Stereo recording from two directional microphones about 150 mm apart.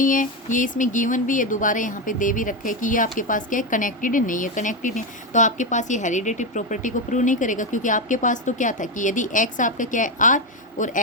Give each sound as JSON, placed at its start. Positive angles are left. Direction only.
{"t": 0.0, "sound": "speech", "side_deg": 60}